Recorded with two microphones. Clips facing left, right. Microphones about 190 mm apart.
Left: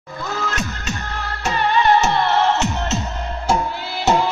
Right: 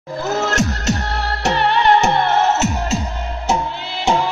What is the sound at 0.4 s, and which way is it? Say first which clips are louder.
Music: right 7 dB; 85° right.